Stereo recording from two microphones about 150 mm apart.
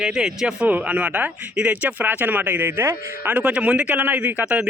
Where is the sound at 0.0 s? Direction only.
5° right (ahead or behind).